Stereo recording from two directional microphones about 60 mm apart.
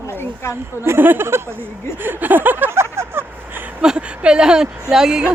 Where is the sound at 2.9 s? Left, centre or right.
Right.